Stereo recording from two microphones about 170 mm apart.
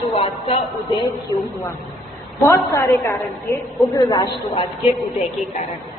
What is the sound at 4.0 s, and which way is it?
Speech, 20° left (ahead or behind).